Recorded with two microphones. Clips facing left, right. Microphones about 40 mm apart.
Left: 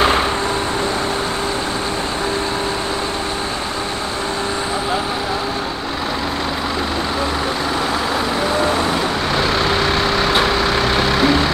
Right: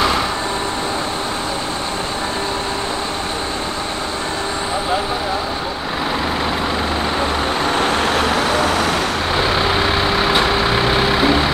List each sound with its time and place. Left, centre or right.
9.3 s vehicle: centre